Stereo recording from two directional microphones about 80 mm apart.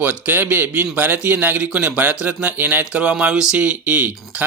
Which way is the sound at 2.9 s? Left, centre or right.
Centre.